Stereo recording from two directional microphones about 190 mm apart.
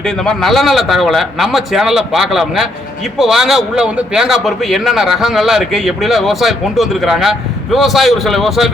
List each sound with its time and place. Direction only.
0.0 s a man's voice: 5° left (ahead or behind)